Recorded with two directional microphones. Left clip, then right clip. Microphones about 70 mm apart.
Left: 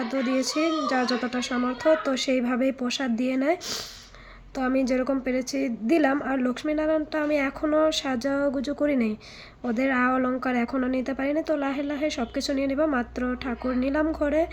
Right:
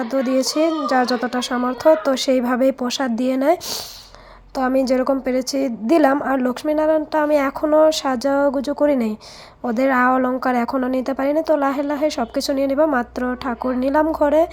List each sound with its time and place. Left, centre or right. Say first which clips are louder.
0.0 s a woman's voice: right 7 dB; right
13.7 s speech: right 8 dB; right